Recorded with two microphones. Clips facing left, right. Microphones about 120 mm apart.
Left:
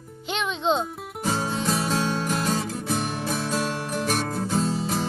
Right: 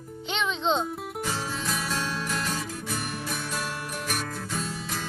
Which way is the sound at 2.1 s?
35° left (ahead or behind).